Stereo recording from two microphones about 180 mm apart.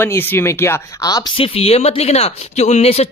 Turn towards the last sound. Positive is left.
turn(degrees=35)  # may be behind; listen again after turning